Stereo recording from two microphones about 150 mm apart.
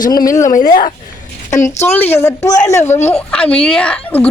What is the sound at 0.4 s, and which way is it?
Speech, 60° left (ahead or behind).